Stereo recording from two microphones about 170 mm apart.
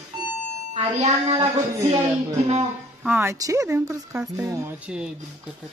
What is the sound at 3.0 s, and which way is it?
Speech, 10° right (ahead or behind).